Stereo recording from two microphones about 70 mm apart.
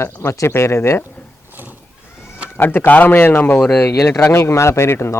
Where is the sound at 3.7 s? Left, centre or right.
Left.